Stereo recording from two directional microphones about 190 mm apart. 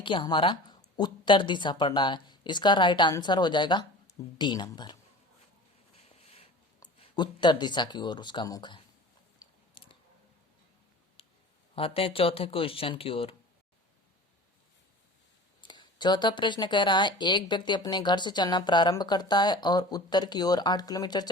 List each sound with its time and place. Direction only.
0.0 s speech: 25° left (ahead or behind)
6.0 s a sound: 30° left (ahead or behind)
7.0 s speech: 25° left (ahead or behind)
9.4 s biting: 25° left (ahead or behind)
11.2 s a sound: 30° left (ahead or behind)
11.7 s speech: 30° left (ahead or behind)
15.6 s speech: 25° left (ahead or behind)